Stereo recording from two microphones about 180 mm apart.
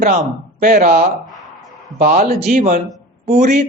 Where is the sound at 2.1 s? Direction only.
35° right (ahead or behind).